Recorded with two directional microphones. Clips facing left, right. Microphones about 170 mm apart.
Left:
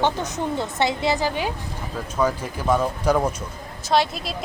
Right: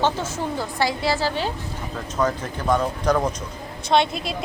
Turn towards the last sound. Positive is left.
turn(degrees=0)  # may be behind; listen again after turning